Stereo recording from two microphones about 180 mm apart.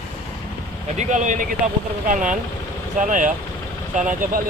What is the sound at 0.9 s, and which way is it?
Speech, 40° right (ahead or behind).